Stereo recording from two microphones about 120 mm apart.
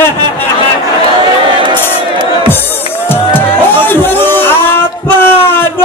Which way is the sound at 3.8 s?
15° left (ahead or behind).